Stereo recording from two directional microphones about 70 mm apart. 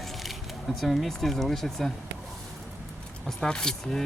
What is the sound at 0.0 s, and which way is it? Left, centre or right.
Speech, centre.